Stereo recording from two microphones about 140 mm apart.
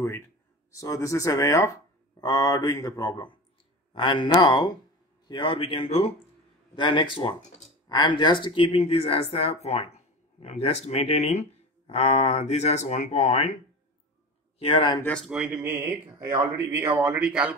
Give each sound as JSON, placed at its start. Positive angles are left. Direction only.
{"t": 0.7, "sound": "speech", "side_deg": 25}
{"t": 14.6, "sound": "speech", "side_deg": 40}
{"t": 15.0, "sound": "speech", "side_deg": 10}
{"t": 15.2, "sound": "speech", "side_deg": -5}